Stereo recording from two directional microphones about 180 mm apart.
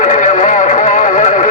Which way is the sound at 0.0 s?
45° left (ahead or behind).